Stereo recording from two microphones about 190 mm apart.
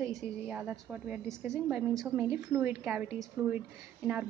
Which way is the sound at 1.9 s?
Centre (ahead or behind).